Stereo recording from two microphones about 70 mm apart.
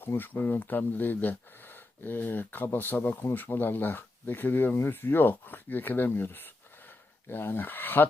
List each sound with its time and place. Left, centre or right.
0.0 s speech: left